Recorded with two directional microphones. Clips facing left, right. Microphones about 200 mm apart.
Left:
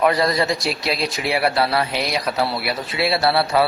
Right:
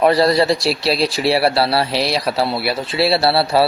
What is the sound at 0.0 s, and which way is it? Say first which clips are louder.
Speech: right 5 dB; 30° right (ahead or behind).